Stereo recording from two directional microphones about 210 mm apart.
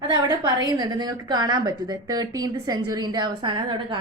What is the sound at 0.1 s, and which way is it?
A woman's voice, 20° right (ahead or behind).